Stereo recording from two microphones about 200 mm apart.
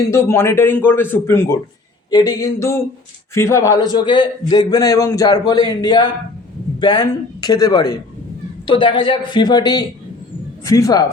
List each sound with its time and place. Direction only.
0.1 s a man's voice: 15° left (ahead or behind)